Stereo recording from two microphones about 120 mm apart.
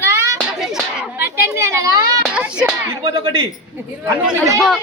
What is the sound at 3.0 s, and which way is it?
Speech, 40° right (ahead or behind).